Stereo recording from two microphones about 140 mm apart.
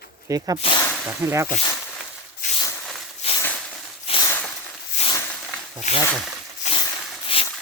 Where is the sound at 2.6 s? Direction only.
20° left (ahead or behind).